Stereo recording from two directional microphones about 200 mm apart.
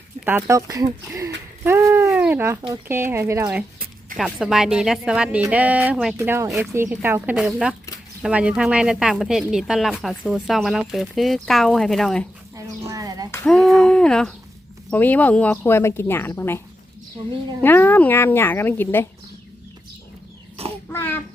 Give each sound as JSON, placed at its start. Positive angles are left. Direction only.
{"t": 0.3, "sound": "speech", "side_deg": -10}
{"t": 12.9, "sound": "music", "side_deg": -15}
{"t": 13.3, "sound": "speech", "side_deg": 5}
{"t": 17.6, "sound": "speech", "side_deg": 10}
{"t": 20.6, "sound": "a sound", "side_deg": -30}
{"t": 20.9, "sound": "a sound", "side_deg": 10}